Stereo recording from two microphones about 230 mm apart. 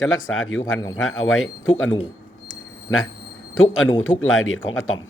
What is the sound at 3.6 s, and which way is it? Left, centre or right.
Speech, left.